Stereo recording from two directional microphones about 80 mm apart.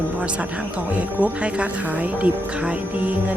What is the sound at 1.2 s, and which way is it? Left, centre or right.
Speech, centre.